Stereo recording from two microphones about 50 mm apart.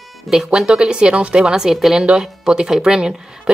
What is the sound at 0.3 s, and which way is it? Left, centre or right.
Speech, centre.